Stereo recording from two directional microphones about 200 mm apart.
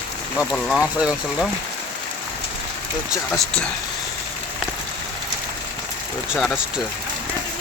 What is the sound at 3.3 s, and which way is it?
Speech, 5° left (ahead or behind).